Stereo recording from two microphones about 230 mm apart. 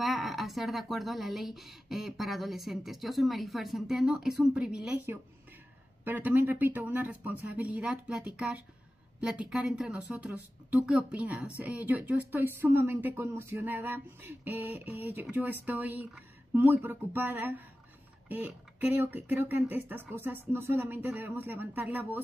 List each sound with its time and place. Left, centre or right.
0.0 s speech: centre